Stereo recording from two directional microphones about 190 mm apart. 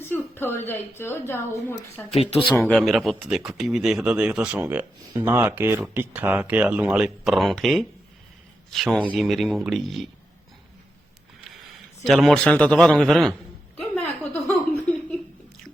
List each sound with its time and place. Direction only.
0.0 s a woman's voice: 10° left (ahead or behind)
2.0 s speech: 35° left (ahead or behind)
2.6 s speech: 5° left (ahead or behind)
12.0 s speech: centre (ahead or behind)
13.7 s a sound: 10° left (ahead or behind)